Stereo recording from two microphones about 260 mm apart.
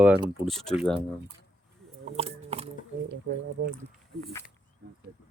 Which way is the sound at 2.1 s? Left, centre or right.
Right.